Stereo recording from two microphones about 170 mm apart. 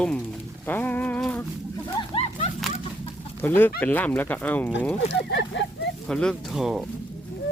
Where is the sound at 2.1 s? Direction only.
40° left (ahead or behind).